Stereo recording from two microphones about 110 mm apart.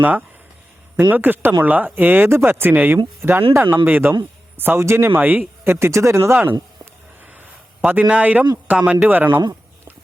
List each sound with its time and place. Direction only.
0.0 s speech: 15° right (ahead or behind)
7.9 s speech: 10° right (ahead or behind)